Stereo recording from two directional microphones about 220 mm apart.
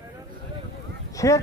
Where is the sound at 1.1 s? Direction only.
15° left (ahead or behind).